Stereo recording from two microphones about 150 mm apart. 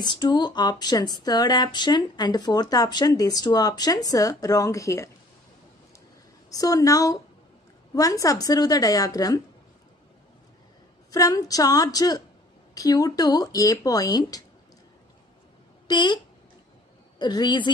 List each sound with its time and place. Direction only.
0.0 s speech: 30° left (ahead or behind)
6.5 s speech: 25° left (ahead or behind)
11.1 s speech: 25° left (ahead or behind)
15.9 s speech: 30° left (ahead or behind)
17.2 s speech: 30° left (ahead or behind)